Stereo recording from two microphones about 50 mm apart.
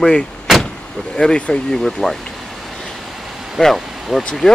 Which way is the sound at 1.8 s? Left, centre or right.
Centre.